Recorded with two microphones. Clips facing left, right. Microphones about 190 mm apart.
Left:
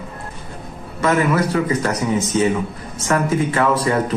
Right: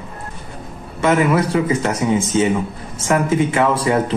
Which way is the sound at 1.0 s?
25° right (ahead or behind).